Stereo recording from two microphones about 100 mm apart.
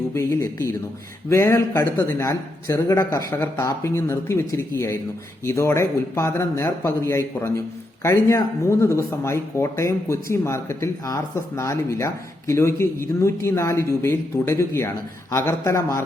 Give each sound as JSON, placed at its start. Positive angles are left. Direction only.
{"t": 0.1, "sound": "speech", "side_deg": 30}